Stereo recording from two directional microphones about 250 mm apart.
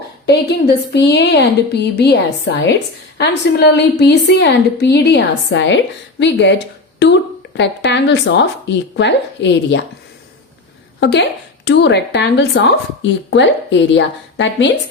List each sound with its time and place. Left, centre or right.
0.9 s a woman's voice: left
11.0 s a woman's voice: left